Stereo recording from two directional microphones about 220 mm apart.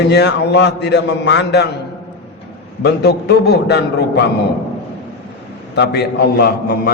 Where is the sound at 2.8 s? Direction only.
50° left (ahead or behind).